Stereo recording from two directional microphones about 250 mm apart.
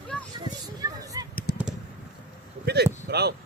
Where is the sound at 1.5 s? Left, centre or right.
Left.